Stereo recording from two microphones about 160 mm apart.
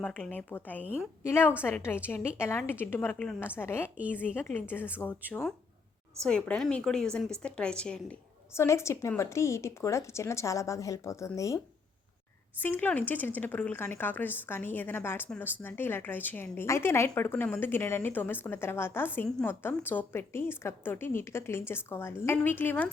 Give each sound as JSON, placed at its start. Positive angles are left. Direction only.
{"t": 0.0, "sound": "a woman's voice", "side_deg": 10}
{"t": 8.5, "sound": "speech", "side_deg": 15}